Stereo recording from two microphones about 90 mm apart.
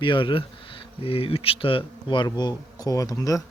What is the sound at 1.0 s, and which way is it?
Speech, 90° left.